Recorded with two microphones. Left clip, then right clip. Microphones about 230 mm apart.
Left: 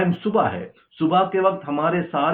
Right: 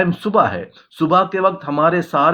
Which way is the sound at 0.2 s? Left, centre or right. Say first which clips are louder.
Right 5 dB; right.